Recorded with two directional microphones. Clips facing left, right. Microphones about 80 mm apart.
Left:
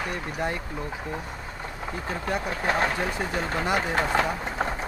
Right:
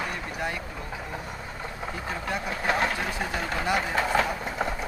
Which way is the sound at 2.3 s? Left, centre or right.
Left.